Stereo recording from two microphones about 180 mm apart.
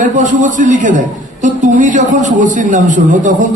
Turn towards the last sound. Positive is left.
turn(degrees=-45)  # may be behind; listen again after turning